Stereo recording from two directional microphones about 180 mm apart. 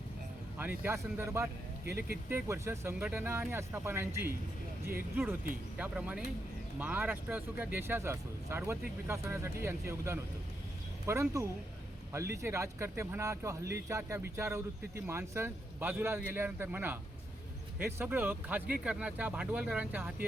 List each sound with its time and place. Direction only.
0.6 s speech: 10° right (ahead or behind)
1.8 s speech: 60° right (ahead or behind)
2.3 s speech: 15° right (ahead or behind)
5.7 s speech: 10° right (ahead or behind)